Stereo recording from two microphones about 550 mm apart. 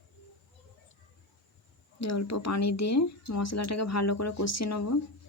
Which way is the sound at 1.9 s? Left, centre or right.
Left.